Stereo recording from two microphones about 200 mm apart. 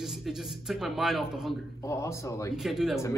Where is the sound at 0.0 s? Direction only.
Centre (ahead or behind).